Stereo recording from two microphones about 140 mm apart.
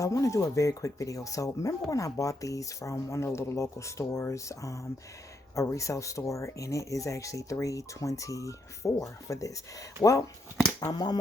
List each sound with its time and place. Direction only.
0.0 s speech: 25° left (ahead or behind)